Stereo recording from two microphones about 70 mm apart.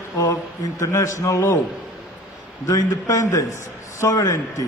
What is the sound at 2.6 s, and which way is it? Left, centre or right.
A man's voice, left.